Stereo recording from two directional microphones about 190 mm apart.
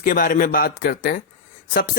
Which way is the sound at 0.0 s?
50° left (ahead or behind).